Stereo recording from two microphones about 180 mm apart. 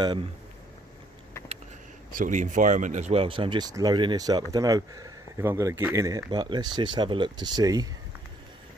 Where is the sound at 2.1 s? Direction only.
45° right (ahead or behind).